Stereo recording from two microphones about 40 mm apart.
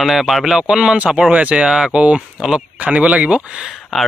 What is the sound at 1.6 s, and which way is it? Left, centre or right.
Speech, centre.